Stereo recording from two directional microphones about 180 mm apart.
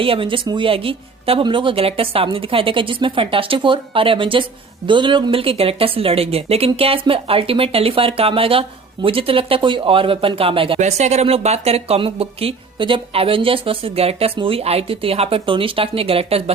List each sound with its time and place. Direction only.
0.0 s a woman's voice: 30° right (ahead or behind)